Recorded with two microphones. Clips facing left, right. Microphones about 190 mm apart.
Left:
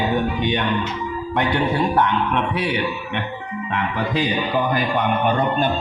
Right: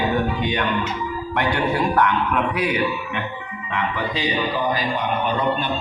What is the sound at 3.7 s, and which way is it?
Speech, 50° left (ahead or behind).